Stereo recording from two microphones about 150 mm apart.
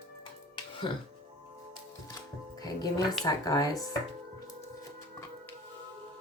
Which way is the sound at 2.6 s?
25° left (ahead or behind).